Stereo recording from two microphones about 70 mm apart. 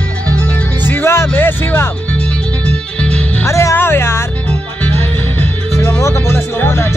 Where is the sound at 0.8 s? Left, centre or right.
Left.